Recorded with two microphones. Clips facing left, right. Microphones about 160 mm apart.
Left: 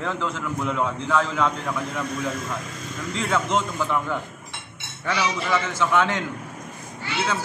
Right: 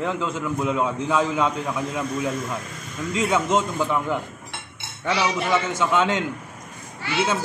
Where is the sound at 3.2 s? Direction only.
15° right (ahead or behind).